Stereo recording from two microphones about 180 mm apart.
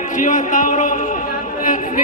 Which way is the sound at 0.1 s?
45° left (ahead or behind).